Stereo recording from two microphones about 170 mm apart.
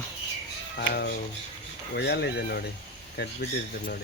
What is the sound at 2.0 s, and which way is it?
Speech, 85° left.